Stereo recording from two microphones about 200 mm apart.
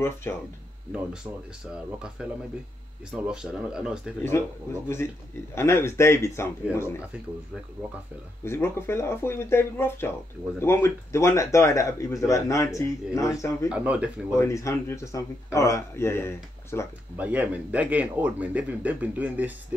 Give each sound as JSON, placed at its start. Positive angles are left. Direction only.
{"t": 0.0, "sound": "speech", "side_deg": 10}
{"t": 2.2, "sound": "speech", "side_deg": -5}
{"t": 4.8, "sound": "speech", "side_deg": 10}
{"t": 8.5, "sound": "speech", "side_deg": 10}
{"t": 13.7, "sound": "speech", "side_deg": -5}
{"t": 14.3, "sound": "speech", "side_deg": 15}
{"t": 17.2, "sound": "speech", "side_deg": -10}